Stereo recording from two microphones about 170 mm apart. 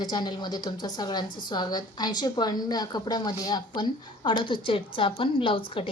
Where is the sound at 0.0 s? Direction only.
25° left (ahead or behind).